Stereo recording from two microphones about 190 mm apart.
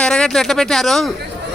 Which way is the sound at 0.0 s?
5° left (ahead or behind).